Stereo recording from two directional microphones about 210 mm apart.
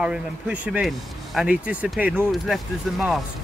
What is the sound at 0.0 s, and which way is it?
Speech, 5° right (ahead or behind).